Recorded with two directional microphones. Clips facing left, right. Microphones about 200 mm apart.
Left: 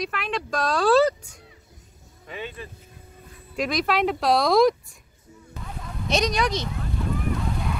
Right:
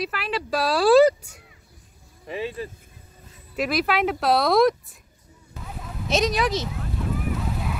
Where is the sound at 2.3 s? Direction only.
35° right (ahead or behind).